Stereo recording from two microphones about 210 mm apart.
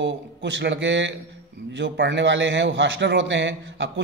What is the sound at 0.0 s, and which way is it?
A man's voice, 60° right (ahead or behind).